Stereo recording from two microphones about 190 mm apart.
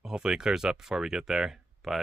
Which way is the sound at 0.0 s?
5° right (ahead or behind).